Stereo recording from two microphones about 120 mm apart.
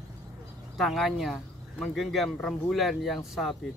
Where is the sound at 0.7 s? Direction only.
Centre (ahead or behind).